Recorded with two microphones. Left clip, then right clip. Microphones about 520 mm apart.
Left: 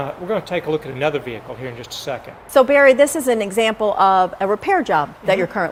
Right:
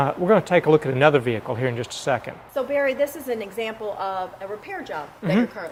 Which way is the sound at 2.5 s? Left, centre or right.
Left.